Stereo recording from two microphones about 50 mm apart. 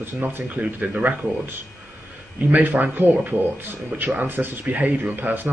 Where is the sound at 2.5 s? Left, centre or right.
Right.